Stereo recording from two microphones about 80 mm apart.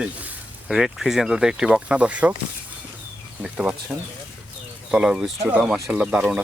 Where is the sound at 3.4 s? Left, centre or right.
Centre.